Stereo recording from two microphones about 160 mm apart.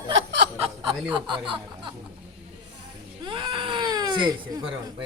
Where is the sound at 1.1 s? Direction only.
30° right (ahead or behind).